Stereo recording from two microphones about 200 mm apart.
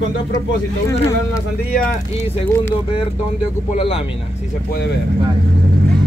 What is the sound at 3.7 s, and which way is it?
Speech, 30° left (ahead or behind).